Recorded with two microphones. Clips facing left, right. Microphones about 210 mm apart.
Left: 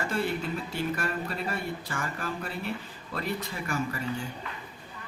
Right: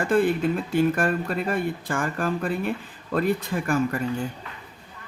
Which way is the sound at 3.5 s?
60° right (ahead or behind).